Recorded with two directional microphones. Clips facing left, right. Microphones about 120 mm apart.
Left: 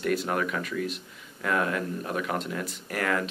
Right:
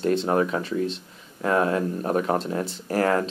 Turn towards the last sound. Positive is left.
turn(degrees=-35)  # may be behind; listen again after turning